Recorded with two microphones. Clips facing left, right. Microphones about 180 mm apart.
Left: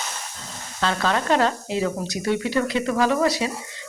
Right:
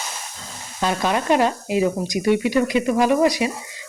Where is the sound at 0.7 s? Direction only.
15° right (ahead or behind).